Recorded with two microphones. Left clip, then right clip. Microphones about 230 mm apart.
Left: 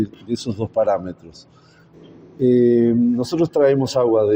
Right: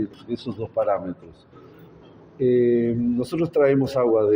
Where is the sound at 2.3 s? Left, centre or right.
Left.